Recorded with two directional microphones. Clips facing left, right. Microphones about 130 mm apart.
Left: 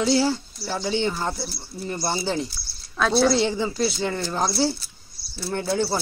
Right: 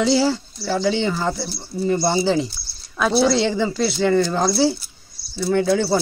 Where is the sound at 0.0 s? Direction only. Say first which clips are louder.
Right 3 dB; 90° right.